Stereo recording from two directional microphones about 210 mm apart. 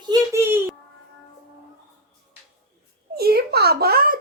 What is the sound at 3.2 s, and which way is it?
A child's voice, 50° right (ahead or behind).